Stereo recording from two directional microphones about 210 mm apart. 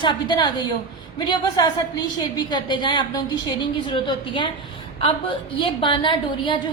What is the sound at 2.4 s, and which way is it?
A woman's voice, 20° left (ahead or behind).